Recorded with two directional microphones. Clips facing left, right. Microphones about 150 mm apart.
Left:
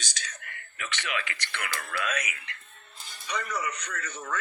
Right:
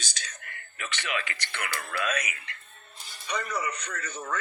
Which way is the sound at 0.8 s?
30° right (ahead or behind).